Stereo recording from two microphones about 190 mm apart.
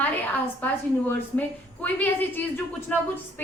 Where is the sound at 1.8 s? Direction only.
10° left (ahead or behind).